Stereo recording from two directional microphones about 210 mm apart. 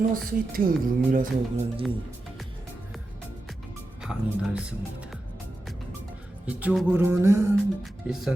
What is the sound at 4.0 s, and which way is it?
Speech, 5° right (ahead or behind).